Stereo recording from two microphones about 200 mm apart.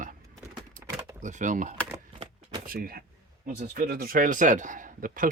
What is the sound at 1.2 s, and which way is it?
A man's voice, 40° right (ahead or behind).